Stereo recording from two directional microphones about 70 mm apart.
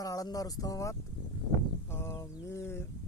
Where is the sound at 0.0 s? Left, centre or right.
Left.